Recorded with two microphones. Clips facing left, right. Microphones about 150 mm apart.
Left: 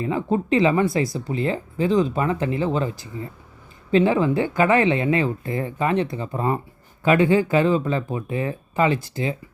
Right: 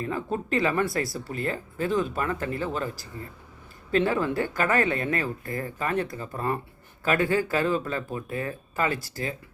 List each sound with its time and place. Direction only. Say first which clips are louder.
0.0 s speech: left 7 dB; 20° left (ahead or behind)